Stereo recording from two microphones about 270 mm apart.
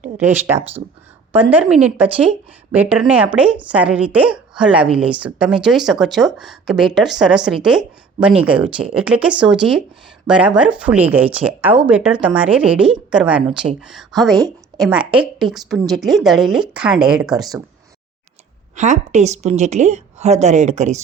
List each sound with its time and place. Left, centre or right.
0.0 s a woman's voice: centre
18.8 s a woman's voice: right